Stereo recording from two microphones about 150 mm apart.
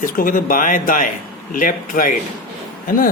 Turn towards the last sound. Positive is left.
turn(degrees=75)  # may be behind; listen again after turning